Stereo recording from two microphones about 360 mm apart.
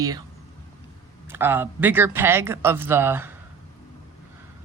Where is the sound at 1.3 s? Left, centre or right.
Centre.